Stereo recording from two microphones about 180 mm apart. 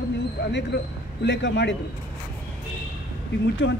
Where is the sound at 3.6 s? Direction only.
90° left.